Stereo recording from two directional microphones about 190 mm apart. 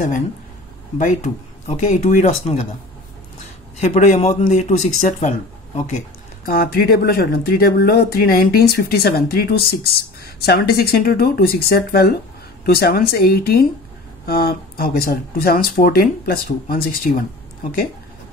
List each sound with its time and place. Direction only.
0.9 s speech: 40° left (ahead or behind)
3.8 s speech: 40° left (ahead or behind)